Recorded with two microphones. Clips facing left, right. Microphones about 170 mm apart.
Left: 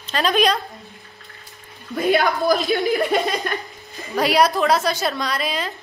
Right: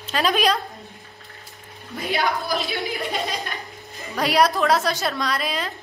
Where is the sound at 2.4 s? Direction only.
40° left (ahead or behind).